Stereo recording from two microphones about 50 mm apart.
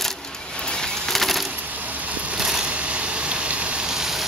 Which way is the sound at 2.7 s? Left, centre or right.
Right.